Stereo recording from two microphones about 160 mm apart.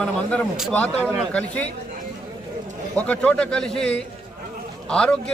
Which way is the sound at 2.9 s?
10° left (ahead or behind).